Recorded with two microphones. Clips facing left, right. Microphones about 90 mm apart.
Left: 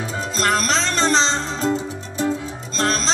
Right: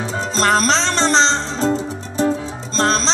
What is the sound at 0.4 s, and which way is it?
Music, 30° right (ahead or behind).